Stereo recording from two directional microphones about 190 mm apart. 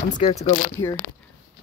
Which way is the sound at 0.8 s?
20° left (ahead or behind).